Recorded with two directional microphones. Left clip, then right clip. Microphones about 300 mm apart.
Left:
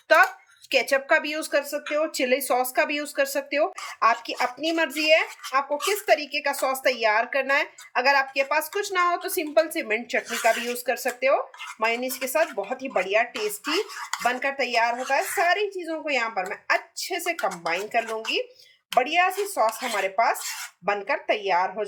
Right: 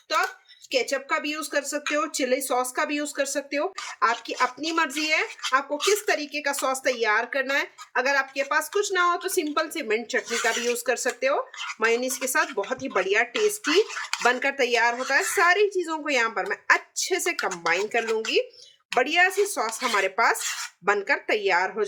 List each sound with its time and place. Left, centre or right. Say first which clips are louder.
0.7 s speech: left 4 dB; centre